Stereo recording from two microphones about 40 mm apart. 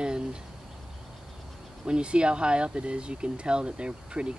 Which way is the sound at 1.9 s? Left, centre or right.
Right.